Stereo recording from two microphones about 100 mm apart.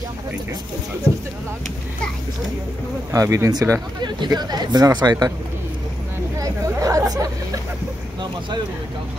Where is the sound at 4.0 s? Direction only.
45° right (ahead or behind).